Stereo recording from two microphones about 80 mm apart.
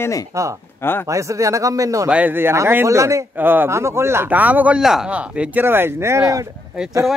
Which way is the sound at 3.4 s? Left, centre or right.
Right.